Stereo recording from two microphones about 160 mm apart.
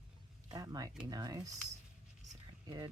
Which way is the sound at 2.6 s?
25° right (ahead or behind).